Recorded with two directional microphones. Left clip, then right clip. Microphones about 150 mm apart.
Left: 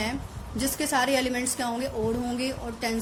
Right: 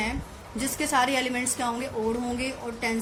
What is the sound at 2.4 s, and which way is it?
Speech, 45° left (ahead or behind).